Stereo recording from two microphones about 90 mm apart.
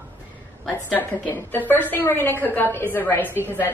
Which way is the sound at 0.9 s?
20° left (ahead or behind).